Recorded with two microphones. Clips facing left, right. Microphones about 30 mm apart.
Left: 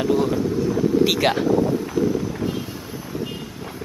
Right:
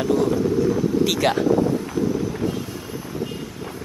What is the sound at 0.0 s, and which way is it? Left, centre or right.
Boat, centre.